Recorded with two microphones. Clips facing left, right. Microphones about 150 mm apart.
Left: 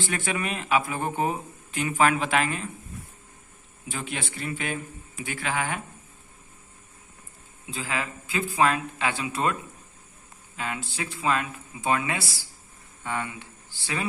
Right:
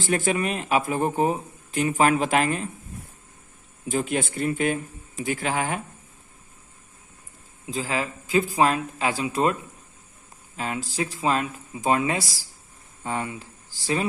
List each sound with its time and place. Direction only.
0.0 s speech: 40° right (ahead or behind)
3.8 s a man's voice: 45° right (ahead or behind)
7.7 s speech: 35° right (ahead or behind)
10.6 s speech: 35° right (ahead or behind)